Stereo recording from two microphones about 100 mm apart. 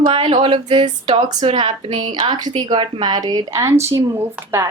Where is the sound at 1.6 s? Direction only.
50° right (ahead or behind).